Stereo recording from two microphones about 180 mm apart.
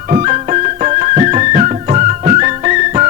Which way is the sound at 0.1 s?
35° right (ahead or behind).